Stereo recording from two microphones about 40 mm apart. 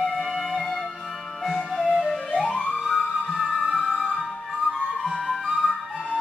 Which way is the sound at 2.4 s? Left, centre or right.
Left.